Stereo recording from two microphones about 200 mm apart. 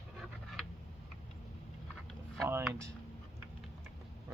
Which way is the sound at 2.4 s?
10° right (ahead or behind).